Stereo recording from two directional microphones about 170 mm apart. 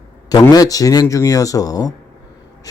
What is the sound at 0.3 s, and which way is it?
A man's voice, 20° left (ahead or behind).